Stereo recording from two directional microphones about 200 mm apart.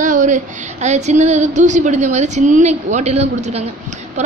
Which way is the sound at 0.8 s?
35° right (ahead or behind).